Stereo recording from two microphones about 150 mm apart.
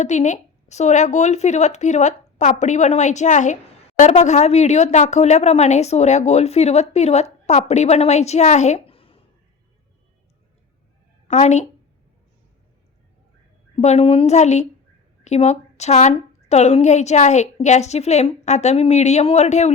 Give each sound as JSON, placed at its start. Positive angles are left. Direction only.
{"t": 0.0, "sound": "a woman's voice", "side_deg": 50}
{"t": 11.3, "sound": "a woman's voice", "side_deg": 50}
{"t": 13.8, "sound": "a woman's voice", "side_deg": 40}